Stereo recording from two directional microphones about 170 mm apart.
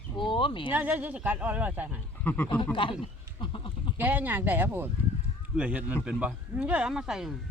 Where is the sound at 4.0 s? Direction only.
10° right (ahead or behind).